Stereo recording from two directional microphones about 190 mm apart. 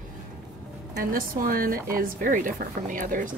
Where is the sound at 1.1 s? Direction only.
45° right (ahead or behind).